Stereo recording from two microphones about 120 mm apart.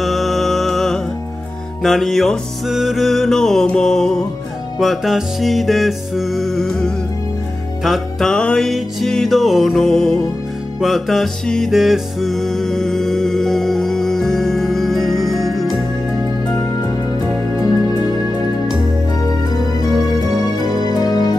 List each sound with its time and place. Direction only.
0.0 s music: centre (ahead or behind)
16.5 s music: 30° left (ahead or behind)
19.5 s music: 30° left (ahead or behind)